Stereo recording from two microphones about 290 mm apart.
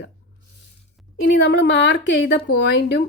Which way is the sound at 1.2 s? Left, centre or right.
Left.